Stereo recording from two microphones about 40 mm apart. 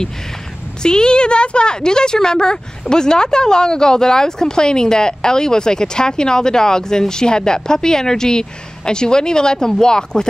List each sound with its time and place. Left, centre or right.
0.8 s speech: left